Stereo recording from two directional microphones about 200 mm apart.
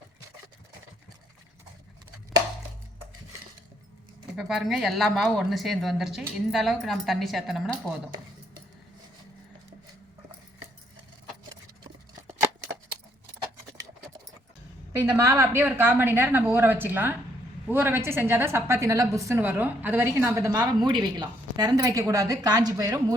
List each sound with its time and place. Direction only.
4.4 s a woman's voice: centre (ahead or behind)
14.9 s a woman's voice: 10° right (ahead or behind)